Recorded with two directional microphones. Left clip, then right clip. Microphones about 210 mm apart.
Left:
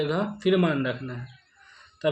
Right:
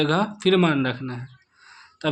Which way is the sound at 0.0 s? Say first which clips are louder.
Right 5 dB; 35° right (ahead or behind).